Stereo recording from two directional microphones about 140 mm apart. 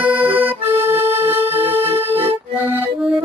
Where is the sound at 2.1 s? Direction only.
45° right (ahead or behind).